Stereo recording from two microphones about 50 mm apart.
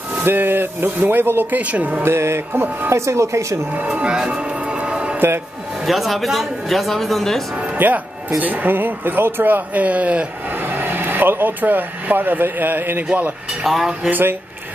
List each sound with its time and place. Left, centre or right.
0.1 s speech: right
1.6 s speech: right
2.0 s music: right
2.5 s speech: right
2.9 s speech: right
4.0 s music: centre
5.9 s speech: centre
7.7 s speech: right
10.5 s speech: right
13.1 s speech: right